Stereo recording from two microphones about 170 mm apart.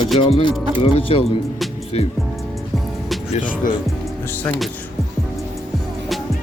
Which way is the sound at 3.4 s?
50° left (ahead or behind).